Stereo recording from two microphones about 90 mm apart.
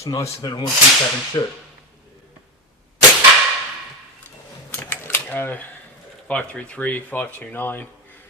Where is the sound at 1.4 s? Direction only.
45° left (ahead or behind).